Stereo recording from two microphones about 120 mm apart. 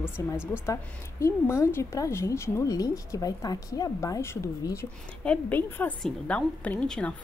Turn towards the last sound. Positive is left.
turn(degrees=10)  # may be behind; listen again after turning